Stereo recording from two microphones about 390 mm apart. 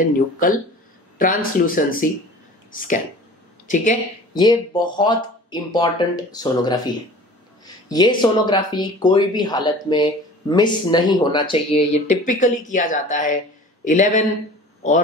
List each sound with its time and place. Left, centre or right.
1.1 s speech: left